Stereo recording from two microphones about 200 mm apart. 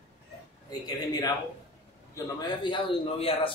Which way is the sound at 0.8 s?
20° left (ahead or behind).